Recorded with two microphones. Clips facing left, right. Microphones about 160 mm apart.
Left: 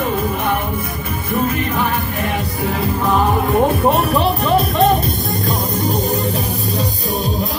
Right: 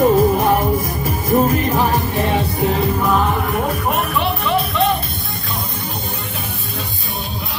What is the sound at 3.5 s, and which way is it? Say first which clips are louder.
Music: left 5 dB; 35° left (ahead or behind).